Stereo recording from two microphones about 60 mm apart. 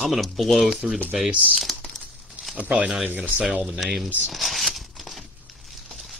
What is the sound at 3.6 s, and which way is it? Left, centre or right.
Speech, centre.